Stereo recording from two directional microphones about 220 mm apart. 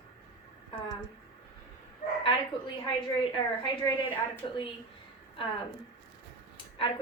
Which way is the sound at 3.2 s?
20° left (ahead or behind).